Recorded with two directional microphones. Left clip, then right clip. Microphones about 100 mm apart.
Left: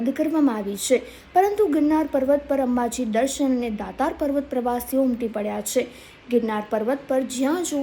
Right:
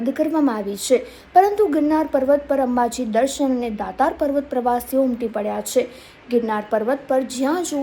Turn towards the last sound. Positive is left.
turn(degrees=15)  # may be behind; listen again after turning